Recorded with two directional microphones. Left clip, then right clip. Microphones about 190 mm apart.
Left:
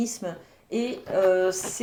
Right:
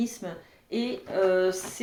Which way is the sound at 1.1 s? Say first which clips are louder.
Left 3 dB; 35° left (ahead or behind).